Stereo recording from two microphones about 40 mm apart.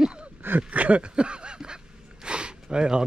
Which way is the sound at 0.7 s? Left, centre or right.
Right.